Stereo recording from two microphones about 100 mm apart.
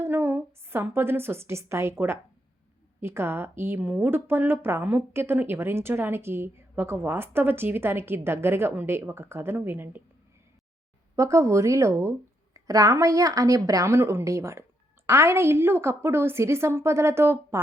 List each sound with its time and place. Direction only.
0.0 s a woman's voice: 20° right (ahead or behind)
11.2 s a woman's voice: 30° right (ahead or behind)